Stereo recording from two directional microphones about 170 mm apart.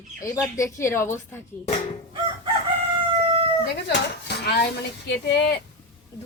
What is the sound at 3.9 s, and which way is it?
Speech, 75° left (ahead or behind).